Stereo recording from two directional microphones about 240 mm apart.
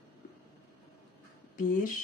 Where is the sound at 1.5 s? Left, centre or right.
Left.